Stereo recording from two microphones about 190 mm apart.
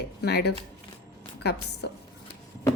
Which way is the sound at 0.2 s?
60° left (ahead or behind).